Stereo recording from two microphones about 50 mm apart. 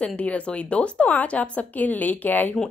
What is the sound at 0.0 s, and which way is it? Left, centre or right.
A woman's voice, left.